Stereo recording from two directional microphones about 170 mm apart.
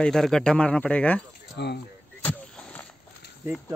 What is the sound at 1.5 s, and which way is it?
Speech, 80° left.